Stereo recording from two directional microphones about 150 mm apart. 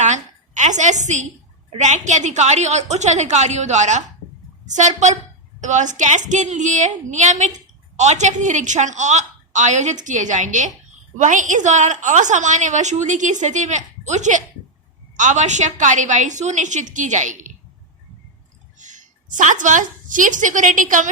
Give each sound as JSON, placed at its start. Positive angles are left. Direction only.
{"t": 0.0, "sound": "a sound", "side_deg": -50}
{"t": 1.7, "sound": "a woman's voice", "side_deg": -55}
{"t": 18.8, "sound": "a woman's voice", "side_deg": -55}